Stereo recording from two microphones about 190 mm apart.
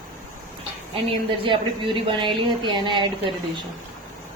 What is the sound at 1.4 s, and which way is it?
Speech, 25° right (ahead or behind).